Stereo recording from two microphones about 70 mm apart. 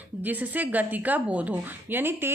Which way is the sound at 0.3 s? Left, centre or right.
Right.